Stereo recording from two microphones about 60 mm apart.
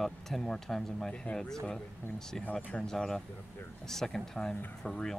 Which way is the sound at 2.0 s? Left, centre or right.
Left.